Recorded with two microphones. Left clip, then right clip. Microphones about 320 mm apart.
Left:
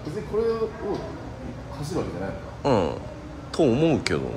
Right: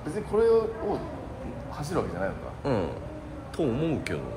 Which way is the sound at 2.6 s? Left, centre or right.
Centre.